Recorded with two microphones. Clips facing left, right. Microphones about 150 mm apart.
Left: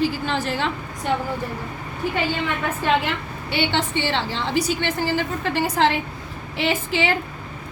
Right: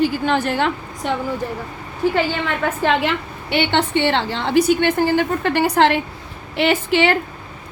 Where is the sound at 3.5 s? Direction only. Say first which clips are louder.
Right 5 dB; 60° right (ahead or behind).